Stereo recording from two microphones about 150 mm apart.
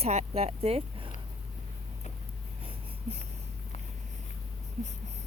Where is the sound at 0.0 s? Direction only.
45° right (ahead or behind).